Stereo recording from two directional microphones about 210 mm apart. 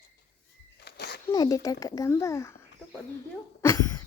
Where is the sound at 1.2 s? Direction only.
15° left (ahead or behind).